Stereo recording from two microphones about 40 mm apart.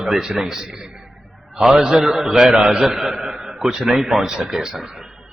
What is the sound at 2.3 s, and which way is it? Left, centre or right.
A man's voice, right.